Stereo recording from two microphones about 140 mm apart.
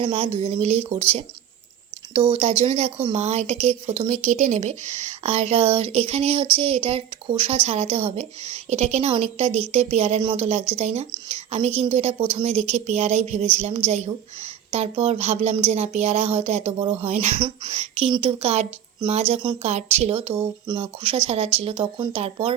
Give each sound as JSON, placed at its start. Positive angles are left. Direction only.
{"t": 0.0, "sound": "speech", "side_deg": -45}
{"t": 2.3, "sound": "speech", "side_deg": -45}
{"t": 4.3, "sound": "speech", "side_deg": -65}